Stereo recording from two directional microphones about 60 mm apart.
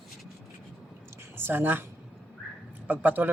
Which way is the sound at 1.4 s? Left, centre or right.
Right.